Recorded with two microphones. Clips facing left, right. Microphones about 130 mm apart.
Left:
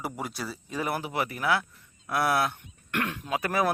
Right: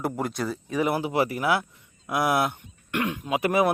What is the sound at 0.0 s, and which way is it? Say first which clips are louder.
Speech: right 6 dB; 5° left (ahead or behind).